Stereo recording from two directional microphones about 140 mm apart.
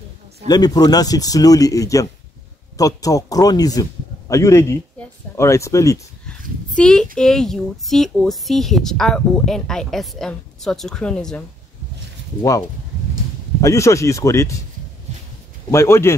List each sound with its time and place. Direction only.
0.5 s speech: 30° left (ahead or behind)
6.8 s speech: 5° left (ahead or behind)
12.4 s speech: 25° left (ahead or behind)
15.7 s speech: 20° left (ahead or behind)